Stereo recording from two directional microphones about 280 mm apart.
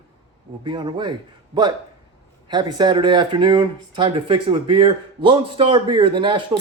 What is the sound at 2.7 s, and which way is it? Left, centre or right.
A man's voice, centre.